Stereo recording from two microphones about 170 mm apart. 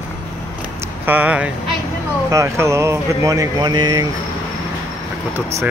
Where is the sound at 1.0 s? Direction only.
10° right (ahead or behind).